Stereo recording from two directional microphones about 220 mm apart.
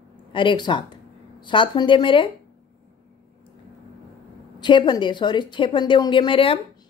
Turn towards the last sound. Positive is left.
turn(degrees=25)  # may be behind; listen again after turning